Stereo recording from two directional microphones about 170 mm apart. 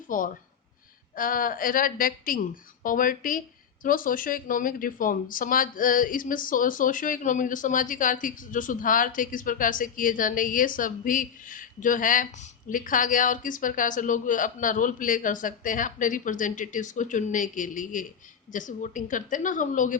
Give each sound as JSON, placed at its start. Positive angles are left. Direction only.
{"t": 0.1, "sound": "a woman's voice", "side_deg": 50}